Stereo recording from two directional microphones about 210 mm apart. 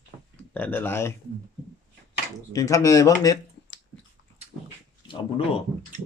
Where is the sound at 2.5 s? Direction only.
15° left (ahead or behind).